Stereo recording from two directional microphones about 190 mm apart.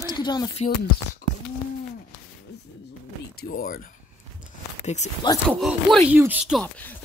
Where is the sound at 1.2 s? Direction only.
50° left (ahead or behind).